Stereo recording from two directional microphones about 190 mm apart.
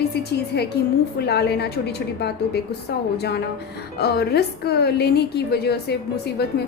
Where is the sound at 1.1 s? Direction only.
60° left (ahead or behind).